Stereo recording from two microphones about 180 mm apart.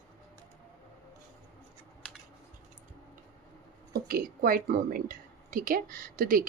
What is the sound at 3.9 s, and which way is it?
A woman's voice, 55° right (ahead or behind).